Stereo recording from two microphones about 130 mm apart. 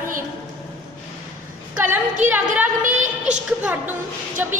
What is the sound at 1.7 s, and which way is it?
Speech, 15° right (ahead or behind).